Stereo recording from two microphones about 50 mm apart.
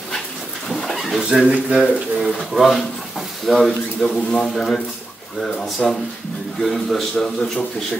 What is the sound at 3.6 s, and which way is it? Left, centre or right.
A man's voice, centre.